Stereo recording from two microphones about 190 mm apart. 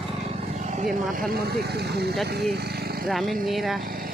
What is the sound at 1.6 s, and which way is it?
Speech, 60° right (ahead or behind).